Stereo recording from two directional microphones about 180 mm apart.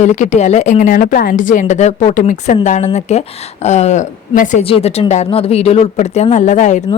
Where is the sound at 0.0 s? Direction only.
40° left (ahead or behind).